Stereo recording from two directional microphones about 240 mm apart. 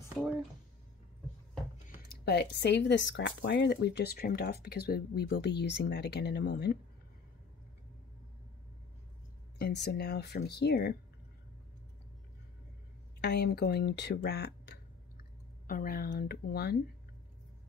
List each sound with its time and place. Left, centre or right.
0.2 s speech: centre
1.9 s speech: left
9.6 s speech: left
13.2 s speech: left